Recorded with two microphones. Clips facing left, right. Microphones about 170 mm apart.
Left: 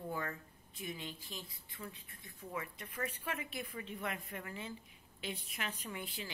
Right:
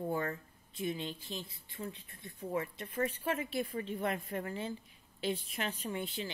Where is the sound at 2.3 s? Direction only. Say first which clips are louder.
Right 8 dB; 35° right (ahead or behind).